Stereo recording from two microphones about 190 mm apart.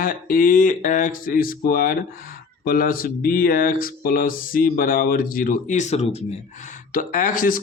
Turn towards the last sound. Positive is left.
turn(degrees=45)  # may be behind; listen again after turning